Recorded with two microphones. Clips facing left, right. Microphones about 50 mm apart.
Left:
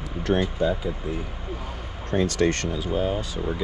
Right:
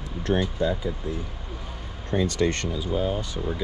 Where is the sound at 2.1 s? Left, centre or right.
Left.